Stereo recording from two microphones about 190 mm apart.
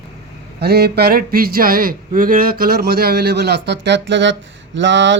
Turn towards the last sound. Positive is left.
turn(degrees=-75)  # may be behind; listen again after turning